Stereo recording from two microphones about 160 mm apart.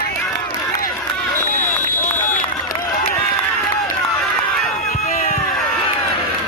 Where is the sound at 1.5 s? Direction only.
55° left (ahead or behind).